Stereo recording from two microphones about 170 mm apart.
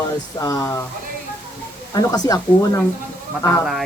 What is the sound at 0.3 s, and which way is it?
Speech, 20° left (ahead or behind).